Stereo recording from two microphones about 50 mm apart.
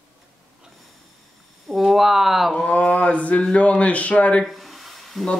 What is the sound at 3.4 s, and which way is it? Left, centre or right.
Speech, left.